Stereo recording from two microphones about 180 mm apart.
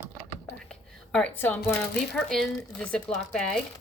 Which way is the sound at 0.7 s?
5° left (ahead or behind).